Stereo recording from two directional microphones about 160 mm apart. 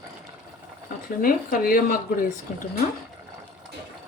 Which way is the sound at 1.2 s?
60° left (ahead or behind).